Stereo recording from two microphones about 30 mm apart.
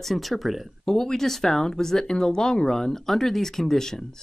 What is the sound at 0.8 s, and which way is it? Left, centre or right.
Speech, centre.